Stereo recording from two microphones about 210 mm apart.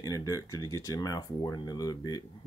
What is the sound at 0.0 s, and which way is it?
Speech, 15° left (ahead or behind).